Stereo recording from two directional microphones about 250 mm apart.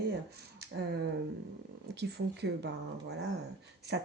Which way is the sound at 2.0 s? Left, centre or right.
Right.